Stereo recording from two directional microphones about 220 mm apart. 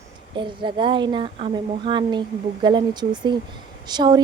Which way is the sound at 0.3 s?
20° right (ahead or behind).